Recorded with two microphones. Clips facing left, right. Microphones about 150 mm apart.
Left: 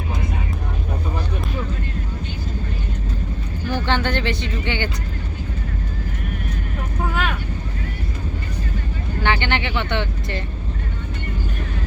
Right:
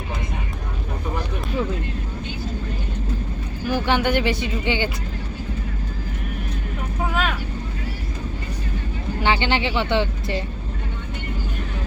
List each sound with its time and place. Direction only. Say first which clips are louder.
3.7 s speech: right 2 dB; 15° right (ahead or behind)
9.2 s speech: right 1 dB; 15° right (ahead or behind)